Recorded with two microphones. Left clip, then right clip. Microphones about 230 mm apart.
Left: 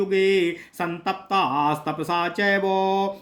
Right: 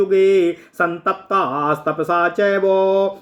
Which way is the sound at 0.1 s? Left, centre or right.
Centre.